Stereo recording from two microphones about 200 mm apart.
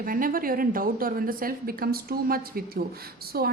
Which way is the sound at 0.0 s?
45° right (ahead or behind).